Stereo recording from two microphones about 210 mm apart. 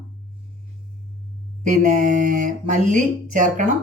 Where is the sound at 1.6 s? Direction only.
40° right (ahead or behind).